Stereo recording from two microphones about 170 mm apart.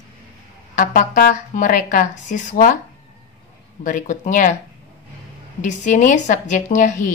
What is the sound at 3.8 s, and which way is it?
Speech, 50° left (ahead or behind).